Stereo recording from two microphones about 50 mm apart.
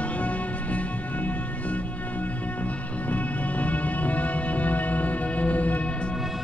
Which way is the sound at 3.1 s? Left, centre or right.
Left.